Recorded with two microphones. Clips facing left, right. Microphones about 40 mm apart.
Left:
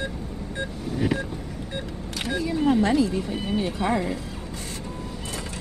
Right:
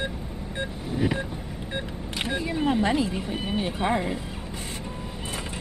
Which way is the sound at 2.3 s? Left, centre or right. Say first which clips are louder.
Left 3 dB; right.